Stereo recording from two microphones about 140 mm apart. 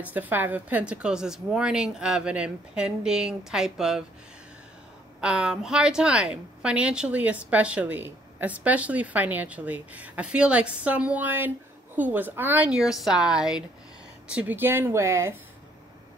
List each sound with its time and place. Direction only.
0.0 s a woman's voice: 10° right (ahead or behind)
5.2 s a woman's voice: 5° right (ahead or behind)